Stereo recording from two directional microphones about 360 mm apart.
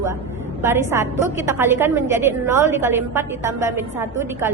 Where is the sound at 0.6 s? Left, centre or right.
Centre.